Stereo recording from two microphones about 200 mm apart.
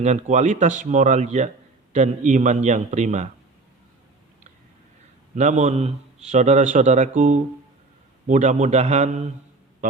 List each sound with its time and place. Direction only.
0.0 s a man's voice: 35° right (ahead or behind)
5.3 s a man's voice: 35° right (ahead or behind)